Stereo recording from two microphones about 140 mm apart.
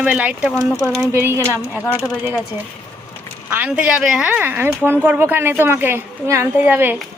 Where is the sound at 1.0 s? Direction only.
15° right (ahead or behind).